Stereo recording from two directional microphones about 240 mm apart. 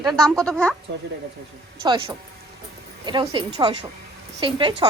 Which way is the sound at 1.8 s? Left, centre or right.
Centre.